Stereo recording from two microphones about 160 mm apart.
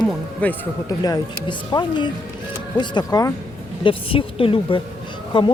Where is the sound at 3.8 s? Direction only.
35° left (ahead or behind).